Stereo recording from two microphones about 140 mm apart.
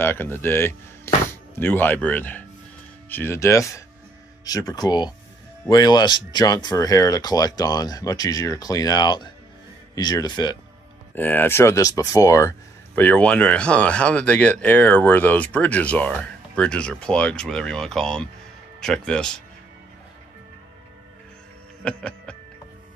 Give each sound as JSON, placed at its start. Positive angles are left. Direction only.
{"t": 0.0, "sound": "speech", "side_deg": 15}
{"t": 11.1, "sound": "speech", "side_deg": 15}
{"t": 21.8, "sound": "music", "side_deg": 5}